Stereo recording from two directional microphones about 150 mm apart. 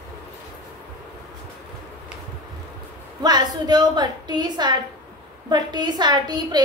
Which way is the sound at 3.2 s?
30° right (ahead or behind).